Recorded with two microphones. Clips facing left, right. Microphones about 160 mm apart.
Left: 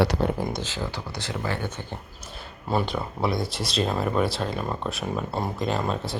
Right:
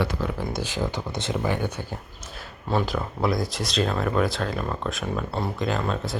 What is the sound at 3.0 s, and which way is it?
Speech, centre (ahead or behind).